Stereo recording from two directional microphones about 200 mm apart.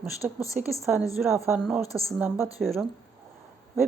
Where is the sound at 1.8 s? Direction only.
15° left (ahead or behind).